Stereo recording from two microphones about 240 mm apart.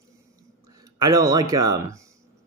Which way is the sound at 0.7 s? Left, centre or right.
Centre.